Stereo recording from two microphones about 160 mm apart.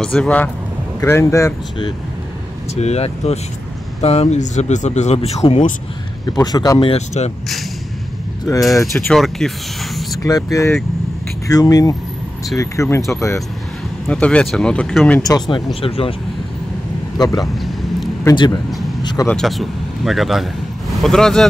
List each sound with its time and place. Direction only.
0.0 s speech: 5° left (ahead or behind)
2.7 s speech: 45° left (ahead or behind)
6.2 s speech: 25° left (ahead or behind)
6.8 s speech: 40° left (ahead or behind)
8.7 s speech: 20° left (ahead or behind)
9.1 s speech: 5° left (ahead or behind)
10.2 s speech: 20° left (ahead or behind)
14.0 s speech: 5° left (ahead or behind)
15.2 s speech: 25° left (ahead or behind)
17.2 s speech: 25° left (ahead or behind)
17.6 s a sound: centre (ahead or behind)
18.3 s speech: 30° left (ahead or behind)
19.2 s speech: centre (ahead or behind)